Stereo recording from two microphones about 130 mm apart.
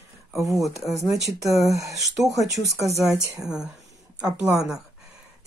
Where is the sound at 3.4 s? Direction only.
5° right (ahead or behind).